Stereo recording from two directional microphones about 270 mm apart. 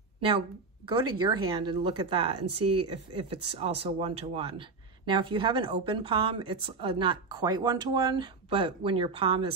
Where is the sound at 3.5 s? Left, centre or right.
Right.